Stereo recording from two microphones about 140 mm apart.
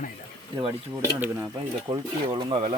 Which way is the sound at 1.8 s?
30° right (ahead or behind).